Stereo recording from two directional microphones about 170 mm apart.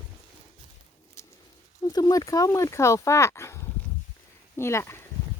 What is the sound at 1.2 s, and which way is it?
Bird, 15° left (ahead or behind).